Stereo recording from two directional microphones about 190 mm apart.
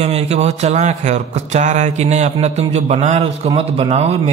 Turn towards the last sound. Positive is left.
turn(degrees=-35)  # may be behind; listen again after turning